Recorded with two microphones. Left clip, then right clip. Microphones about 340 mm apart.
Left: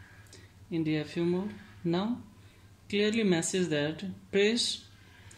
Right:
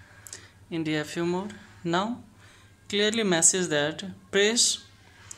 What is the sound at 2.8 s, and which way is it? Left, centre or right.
Speech, centre.